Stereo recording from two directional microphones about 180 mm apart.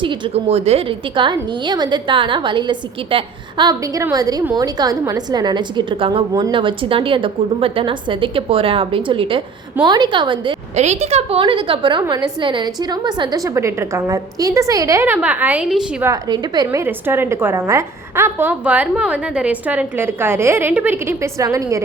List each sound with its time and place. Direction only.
0.0 s a woman's voice: 30° right (ahead or behind)
10.8 s a woman's voice: 35° right (ahead or behind); by 16.0 s 5° right (ahead or behind)
16.0 s a woman's voice: 20° right (ahead or behind)